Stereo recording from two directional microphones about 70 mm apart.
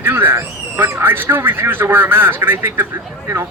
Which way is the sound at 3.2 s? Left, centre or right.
Right.